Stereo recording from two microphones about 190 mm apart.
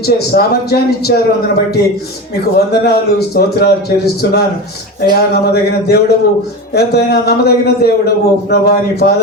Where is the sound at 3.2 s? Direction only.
55° left (ahead or behind).